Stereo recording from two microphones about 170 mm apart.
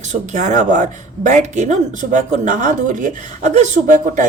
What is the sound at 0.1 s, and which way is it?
A woman's voice, 45° right (ahead or behind).